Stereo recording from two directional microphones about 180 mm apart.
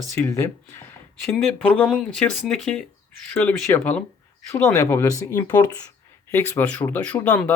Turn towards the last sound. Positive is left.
turn(degrees=10)  # may be behind; listen again after turning